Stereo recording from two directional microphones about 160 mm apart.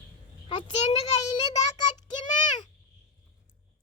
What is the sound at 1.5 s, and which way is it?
Child singing, 25° left (ahead or behind).